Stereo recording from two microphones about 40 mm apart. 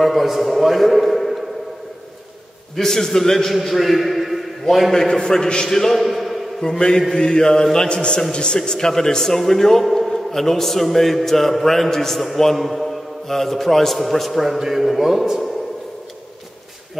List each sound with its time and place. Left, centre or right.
0.0 s a man's voice: centre
2.7 s a man's voice: centre
3.5 s a man's voice: centre
4.9 s a man's voice: centre
6.6 s a man's voice: centre
7.2 s mantra: centre
7.6 s a man's voice: centre